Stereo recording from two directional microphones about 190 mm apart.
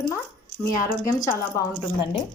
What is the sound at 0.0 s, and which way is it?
Dog, 10° left (ahead or behind).